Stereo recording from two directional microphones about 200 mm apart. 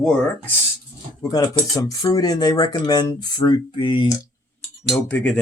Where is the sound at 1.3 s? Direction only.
20° left (ahead or behind).